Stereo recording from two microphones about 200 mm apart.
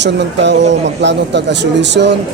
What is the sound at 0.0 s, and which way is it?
A man's voice, 60° right (ahead or behind).